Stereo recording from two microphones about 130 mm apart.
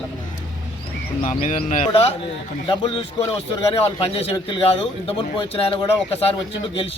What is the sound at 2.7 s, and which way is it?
A man's voice, 40° left (ahead or behind).